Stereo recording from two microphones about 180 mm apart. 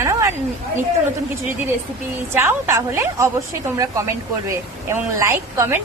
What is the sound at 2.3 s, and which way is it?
Speech, 15° right (ahead or behind).